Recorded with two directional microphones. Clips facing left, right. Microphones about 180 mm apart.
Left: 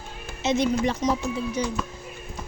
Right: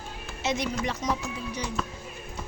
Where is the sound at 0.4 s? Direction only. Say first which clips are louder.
Left 6 dB; 25° left (ahead or behind).